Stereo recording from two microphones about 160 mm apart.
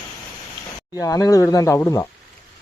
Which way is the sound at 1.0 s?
20° left (ahead or behind).